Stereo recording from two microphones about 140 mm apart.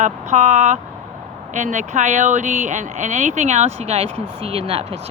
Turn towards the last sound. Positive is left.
turn(degrees=-45)  # may be behind; listen again after turning